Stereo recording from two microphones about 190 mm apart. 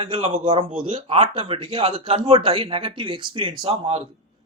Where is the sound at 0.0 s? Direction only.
30° right (ahead or behind).